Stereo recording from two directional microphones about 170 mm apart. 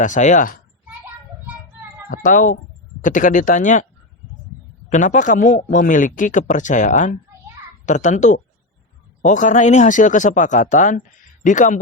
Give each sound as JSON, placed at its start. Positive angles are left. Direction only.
{"t": 0.0, "sound": "speech", "side_deg": 45}
{"t": 2.0, "sound": "speech", "side_deg": 55}
{"t": 4.9, "sound": "speech", "side_deg": 45}